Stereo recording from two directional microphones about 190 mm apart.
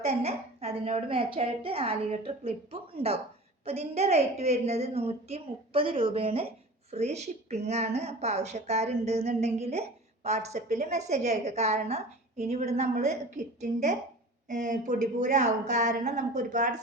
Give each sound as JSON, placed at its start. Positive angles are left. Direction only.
{"t": 0.0, "sound": "speech", "side_deg": -30}